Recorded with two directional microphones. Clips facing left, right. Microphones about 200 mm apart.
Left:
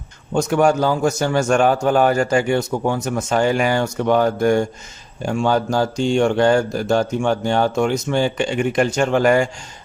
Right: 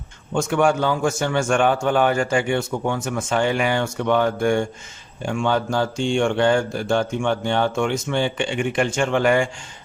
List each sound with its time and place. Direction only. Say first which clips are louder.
0.3 s a man's voice: left 3 dB; 40° left (ahead or behind)